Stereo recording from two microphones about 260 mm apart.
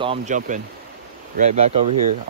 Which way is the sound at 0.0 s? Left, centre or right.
Right.